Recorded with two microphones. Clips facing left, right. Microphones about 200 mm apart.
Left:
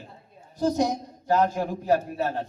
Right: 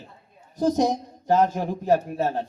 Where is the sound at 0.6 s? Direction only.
20° right (ahead or behind).